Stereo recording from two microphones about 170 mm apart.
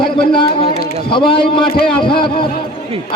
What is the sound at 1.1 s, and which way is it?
A man's voice, 30° left (ahead or behind).